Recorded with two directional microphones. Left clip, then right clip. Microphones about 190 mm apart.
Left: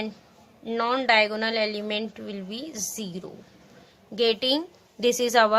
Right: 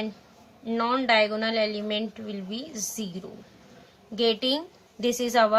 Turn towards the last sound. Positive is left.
turn(degrees=55)  # may be behind; listen again after turning